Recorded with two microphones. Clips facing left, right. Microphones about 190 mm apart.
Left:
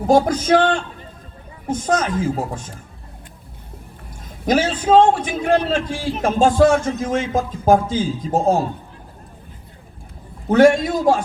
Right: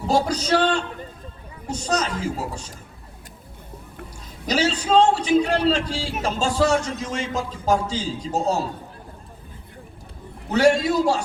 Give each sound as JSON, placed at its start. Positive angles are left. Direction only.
{"t": 0.0, "sound": "a man's voice", "side_deg": 50}
{"t": 4.4, "sound": "a man's voice", "side_deg": 50}
{"t": 10.5, "sound": "a man's voice", "side_deg": 50}